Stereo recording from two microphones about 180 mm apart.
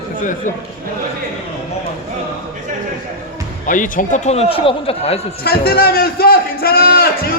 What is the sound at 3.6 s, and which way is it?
A man's voice, 45° left (ahead or behind).